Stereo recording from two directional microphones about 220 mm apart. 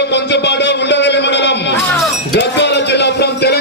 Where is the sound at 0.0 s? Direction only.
50° left (ahead or behind).